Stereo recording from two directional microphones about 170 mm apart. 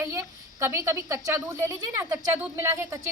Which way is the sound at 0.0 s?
15° right (ahead or behind).